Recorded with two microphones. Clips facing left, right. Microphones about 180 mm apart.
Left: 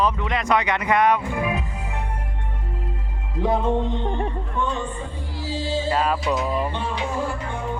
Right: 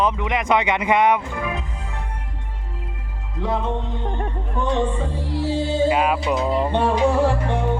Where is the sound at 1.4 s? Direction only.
10° left (ahead or behind).